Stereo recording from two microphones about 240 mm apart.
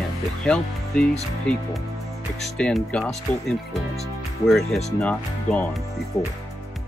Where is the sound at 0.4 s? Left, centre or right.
Centre.